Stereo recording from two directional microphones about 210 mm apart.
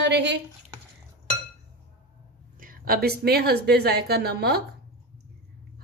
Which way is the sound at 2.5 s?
45° right (ahead or behind).